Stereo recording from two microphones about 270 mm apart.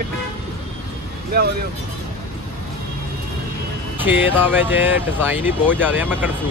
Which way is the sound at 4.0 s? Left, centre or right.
Centre.